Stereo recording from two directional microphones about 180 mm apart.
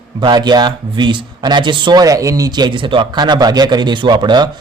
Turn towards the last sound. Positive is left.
turn(degrees=-25)  # may be behind; listen again after turning